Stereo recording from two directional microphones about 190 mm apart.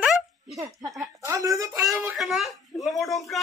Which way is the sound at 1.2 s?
15° right (ahead or behind).